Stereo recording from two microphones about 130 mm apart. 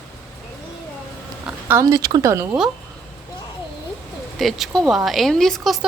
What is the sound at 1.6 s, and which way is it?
Speech, 20° right (ahead or behind).